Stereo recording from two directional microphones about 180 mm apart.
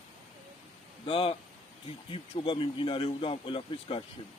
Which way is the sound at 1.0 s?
30° left (ahead or behind).